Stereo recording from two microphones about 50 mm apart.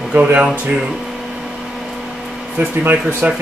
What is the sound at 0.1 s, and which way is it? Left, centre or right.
Speech, right.